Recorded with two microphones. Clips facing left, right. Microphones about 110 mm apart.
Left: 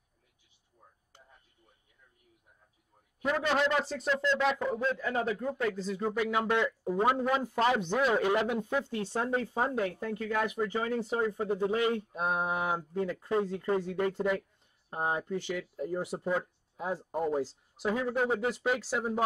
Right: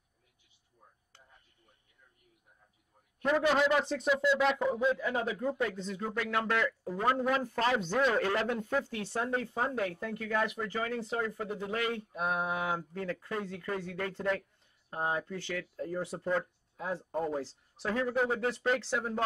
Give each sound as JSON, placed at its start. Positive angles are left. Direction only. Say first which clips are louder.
{"t": 3.2, "sound": "speech", "louder": "right 2 dB", "side_deg": 0}
{"t": 6.0, "sound": "speech", "louder": "left 3 dB", "side_deg": 15}